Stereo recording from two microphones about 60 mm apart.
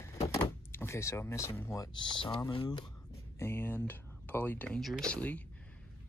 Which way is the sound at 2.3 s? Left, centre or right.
Left.